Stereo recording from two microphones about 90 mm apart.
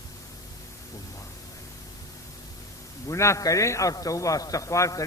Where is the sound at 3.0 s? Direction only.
35° left (ahead or behind).